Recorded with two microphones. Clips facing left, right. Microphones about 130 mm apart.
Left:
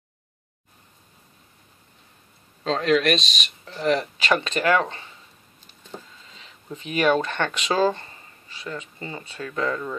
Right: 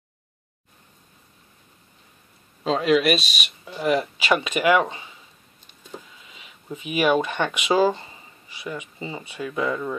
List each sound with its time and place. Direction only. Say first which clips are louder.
2.6 s speech: right 1 dB; 5° right (ahead or behind)
6.2 s speech: right 2 dB; 10° right (ahead or behind)